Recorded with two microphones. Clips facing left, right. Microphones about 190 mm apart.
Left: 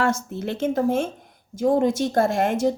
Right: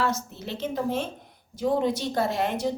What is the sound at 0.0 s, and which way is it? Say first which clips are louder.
A woman's voice: left 5 dB; 50° left (ahead or behind).